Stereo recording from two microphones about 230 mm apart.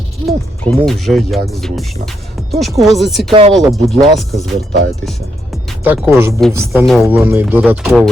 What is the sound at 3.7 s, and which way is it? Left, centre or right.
Speech, centre.